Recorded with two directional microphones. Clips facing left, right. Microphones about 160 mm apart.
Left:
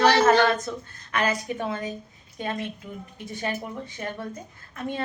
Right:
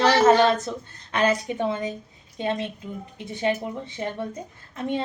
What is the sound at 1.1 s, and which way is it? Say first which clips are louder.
Speech: right 4 dB; 25° right (ahead or behind).